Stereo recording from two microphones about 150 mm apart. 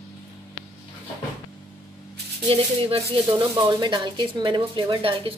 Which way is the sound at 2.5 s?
40° right (ahead or behind).